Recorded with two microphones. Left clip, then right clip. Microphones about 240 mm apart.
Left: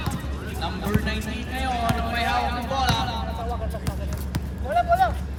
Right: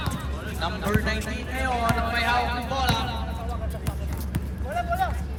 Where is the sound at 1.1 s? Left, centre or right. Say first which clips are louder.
Right 1 dB; centre.